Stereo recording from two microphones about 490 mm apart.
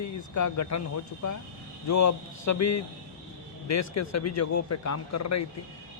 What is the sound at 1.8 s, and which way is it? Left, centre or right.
A man's voice, left.